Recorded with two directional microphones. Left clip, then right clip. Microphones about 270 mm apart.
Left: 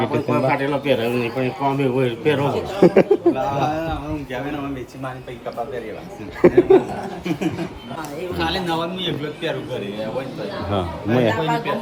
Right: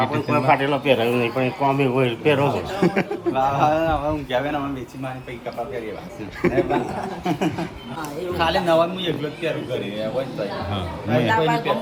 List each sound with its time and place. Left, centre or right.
0.0 s a man's voice: centre
6.4 s a man's voice: centre
10.7 s a man's voice: centre